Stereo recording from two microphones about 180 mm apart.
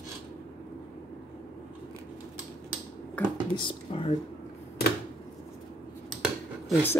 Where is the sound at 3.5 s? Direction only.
30° left (ahead or behind).